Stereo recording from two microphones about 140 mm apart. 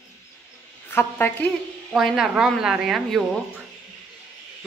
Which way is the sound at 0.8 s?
15° left (ahead or behind).